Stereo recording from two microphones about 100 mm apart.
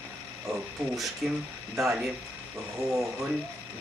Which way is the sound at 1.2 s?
Centre (ahead or behind).